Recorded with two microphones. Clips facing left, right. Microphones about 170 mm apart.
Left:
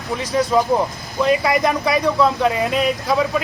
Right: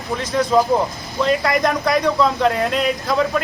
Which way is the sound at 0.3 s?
10° left (ahead or behind).